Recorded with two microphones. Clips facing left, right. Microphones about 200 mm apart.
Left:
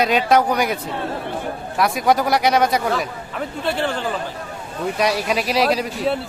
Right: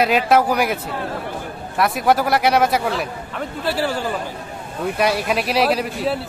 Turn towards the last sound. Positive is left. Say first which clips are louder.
# even
turn(degrees=0)  # may be behind; listen again after turning